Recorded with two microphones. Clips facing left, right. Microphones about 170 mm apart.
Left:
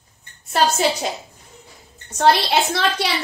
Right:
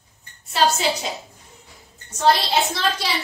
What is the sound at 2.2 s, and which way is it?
Speech, 65° left (ahead or behind).